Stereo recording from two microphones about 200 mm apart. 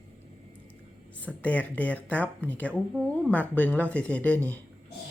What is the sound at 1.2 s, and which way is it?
Speech, 5° left (ahead or behind).